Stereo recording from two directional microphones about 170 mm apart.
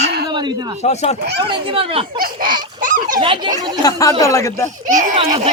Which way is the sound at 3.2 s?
30° right (ahead or behind).